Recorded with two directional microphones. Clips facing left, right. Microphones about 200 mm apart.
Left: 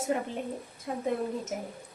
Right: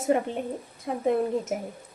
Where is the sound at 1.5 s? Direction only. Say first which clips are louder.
Right 5 dB; 60° right (ahead or behind).